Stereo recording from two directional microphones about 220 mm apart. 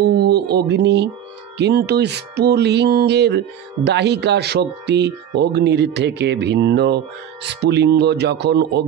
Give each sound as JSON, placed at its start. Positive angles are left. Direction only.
{"t": 0.0, "sound": "speech", "side_deg": -50}
{"t": 1.6, "sound": "music", "side_deg": -45}